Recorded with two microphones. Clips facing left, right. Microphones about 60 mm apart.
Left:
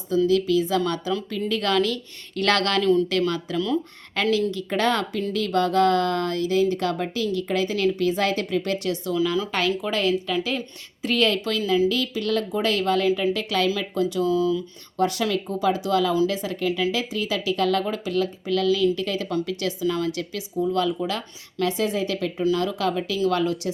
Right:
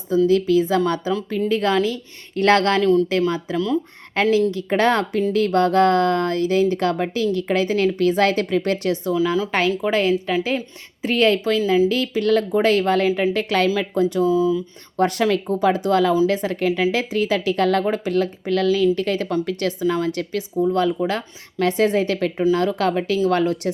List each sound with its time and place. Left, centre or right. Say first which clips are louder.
0.3 s speech: right 4 dB; right
14.9 s speech: right 4 dB; right